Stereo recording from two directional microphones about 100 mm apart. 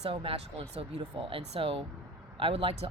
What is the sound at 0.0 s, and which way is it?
Speech, 65° right (ahead or behind).